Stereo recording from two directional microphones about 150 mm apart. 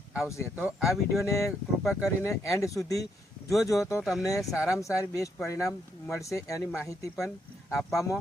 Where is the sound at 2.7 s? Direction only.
20° left (ahead or behind).